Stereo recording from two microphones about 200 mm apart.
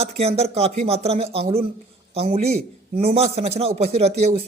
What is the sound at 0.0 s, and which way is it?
Speech, 30° right (ahead or behind).